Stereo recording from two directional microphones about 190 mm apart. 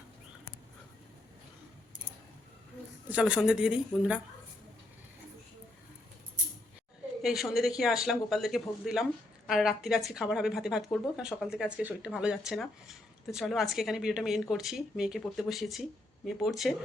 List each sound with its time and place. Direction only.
3.1 s speech: 5° right (ahead or behind)
7.2 s speech: centre (ahead or behind)